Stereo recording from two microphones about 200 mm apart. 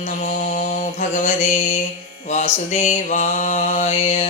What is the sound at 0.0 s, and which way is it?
Mantra, 40° left (ahead or behind).